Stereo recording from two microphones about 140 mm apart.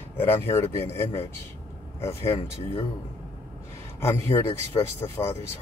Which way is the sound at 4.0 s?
20° left (ahead or behind).